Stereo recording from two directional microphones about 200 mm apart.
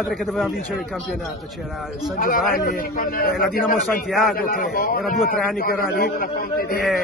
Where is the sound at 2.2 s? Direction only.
45° left (ahead or behind).